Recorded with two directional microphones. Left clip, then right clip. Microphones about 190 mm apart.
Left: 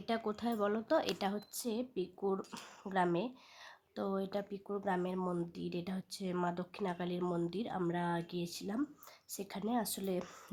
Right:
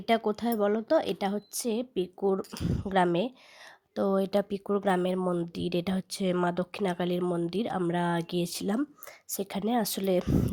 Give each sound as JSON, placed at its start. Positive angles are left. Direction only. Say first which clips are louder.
{"t": 0.0, "sound": "speech", "louder": "right 10 dB", "side_deg": -30}
{"t": 2.9, "sound": "speech", "louder": "right 8 dB", "side_deg": -35}